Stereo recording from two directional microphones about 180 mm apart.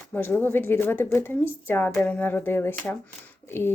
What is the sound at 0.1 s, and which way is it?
A woman's voice, 10° left (ahead or behind).